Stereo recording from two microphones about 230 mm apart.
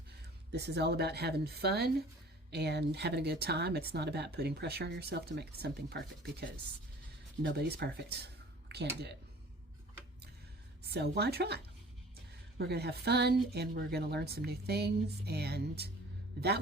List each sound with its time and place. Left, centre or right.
0.5 s speech: right
10.8 s speech: right